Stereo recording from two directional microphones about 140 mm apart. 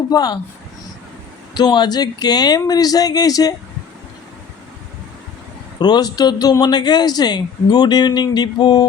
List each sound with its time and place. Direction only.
0.1 s speech: 30° left (ahead or behind)
1.5 s speech: 30° left (ahead or behind)
5.8 s speech: 30° left (ahead or behind)